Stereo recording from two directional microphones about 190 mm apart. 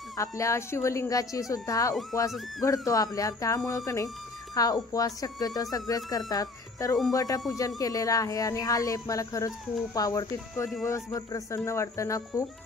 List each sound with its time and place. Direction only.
0.2 s speech: 15° left (ahead or behind)